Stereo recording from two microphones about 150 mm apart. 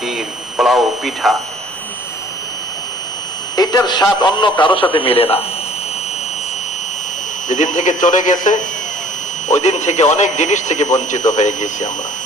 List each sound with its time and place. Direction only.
0.5 s speech: centre (ahead or behind)
3.5 s speech: 25° left (ahead or behind)
7.4 s speech: 55° left (ahead or behind)